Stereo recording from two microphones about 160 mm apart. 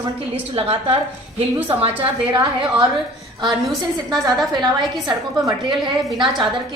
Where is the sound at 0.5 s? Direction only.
35° right (ahead or behind).